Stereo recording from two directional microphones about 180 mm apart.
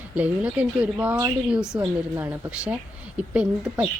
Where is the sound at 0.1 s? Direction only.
10° right (ahead or behind).